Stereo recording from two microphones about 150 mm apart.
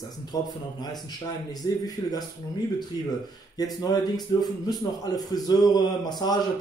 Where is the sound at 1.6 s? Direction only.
25° left (ahead or behind).